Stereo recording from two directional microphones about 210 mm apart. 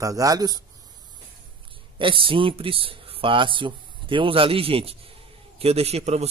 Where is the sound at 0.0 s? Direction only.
15° right (ahead or behind).